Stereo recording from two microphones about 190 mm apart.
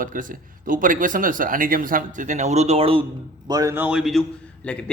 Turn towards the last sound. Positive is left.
turn(degrees=5)  # may be behind; listen again after turning